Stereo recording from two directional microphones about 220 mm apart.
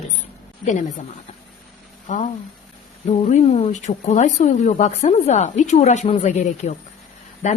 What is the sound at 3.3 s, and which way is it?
A woman's voice, 30° left (ahead or behind).